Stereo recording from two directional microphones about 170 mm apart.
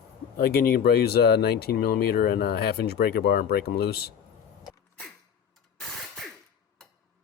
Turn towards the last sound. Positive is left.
turn(degrees=0)  # may be behind; listen again after turning